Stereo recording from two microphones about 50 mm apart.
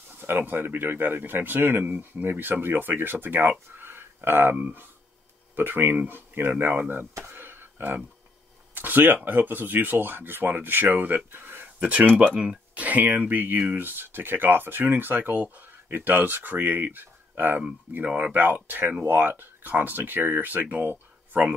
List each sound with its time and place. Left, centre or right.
0.1 s speech: right
4.6 s speech: right
5.6 s speech: right
7.2 s a sound: right
8.7 s speech: right
11.8 s speech: right
20.9 s a sound: right